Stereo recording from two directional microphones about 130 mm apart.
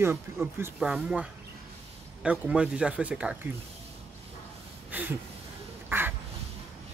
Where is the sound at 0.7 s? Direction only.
5° right (ahead or behind).